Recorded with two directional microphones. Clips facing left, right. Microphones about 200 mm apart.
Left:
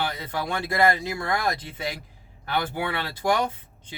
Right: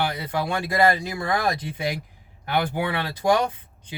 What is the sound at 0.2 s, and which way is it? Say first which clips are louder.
Speech: right 3 dB; 15° right (ahead or behind).